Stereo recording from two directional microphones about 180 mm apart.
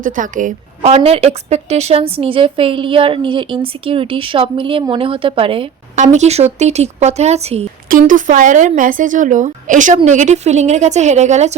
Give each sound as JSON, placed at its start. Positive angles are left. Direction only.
{"t": 0.0, "sound": "a woman's voice", "side_deg": -45}
{"t": 7.9, "sound": "a woman's voice", "side_deg": -50}